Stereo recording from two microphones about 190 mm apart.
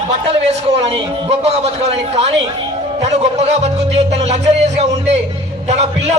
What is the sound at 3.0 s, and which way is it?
Speech, 35° right (ahead or behind).